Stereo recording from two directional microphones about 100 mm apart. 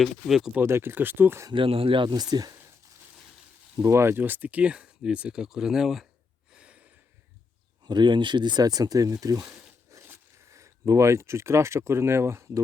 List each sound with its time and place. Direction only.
0.0 s speech: centre (ahead or behind)
0.6 s speech: 25° right (ahead or behind)
1.5 s speech: 65° right (ahead or behind)
2.0 s speech: 45° right (ahead or behind)
3.8 s speech: 30° right (ahead or behind); by 6.1 s 5° right (ahead or behind)
6.5 s a sound: 10° right (ahead or behind)
7.9 s speech: 50° right (ahead or behind)
9.5 s a sound: 30° right (ahead or behind)
10.1 s speech: 30° right (ahead or behind)